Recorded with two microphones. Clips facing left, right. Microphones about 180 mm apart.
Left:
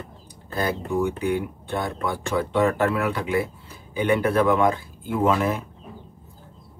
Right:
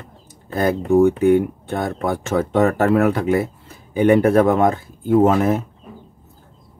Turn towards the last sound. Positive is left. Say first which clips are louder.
# right 7 dB
turn(degrees=-45)  # may be behind; listen again after turning